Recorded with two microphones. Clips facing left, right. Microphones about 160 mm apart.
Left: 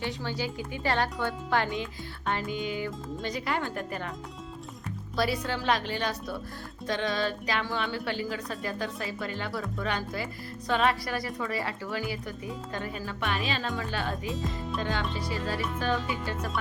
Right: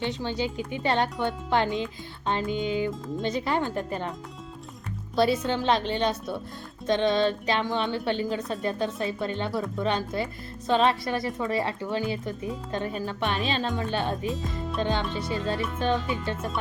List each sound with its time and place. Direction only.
0.0 s speech: 20° right (ahead or behind)
5.1 s speech: 25° right (ahead or behind)
14.3 s speech: centre (ahead or behind)
14.8 s speech: 20° right (ahead or behind)